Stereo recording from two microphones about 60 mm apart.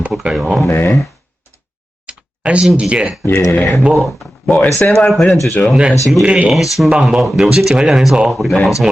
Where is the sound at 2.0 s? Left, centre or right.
Centre.